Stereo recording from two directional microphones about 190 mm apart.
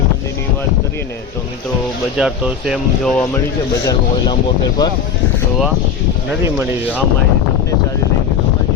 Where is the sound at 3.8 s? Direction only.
20° left (ahead or behind).